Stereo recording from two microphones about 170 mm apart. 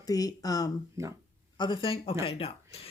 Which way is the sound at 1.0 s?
15° right (ahead or behind).